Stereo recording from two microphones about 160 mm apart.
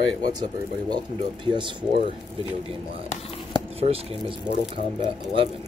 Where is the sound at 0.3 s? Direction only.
25° right (ahead or behind).